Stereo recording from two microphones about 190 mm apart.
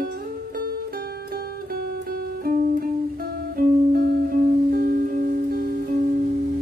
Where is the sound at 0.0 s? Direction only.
50° right (ahead or behind).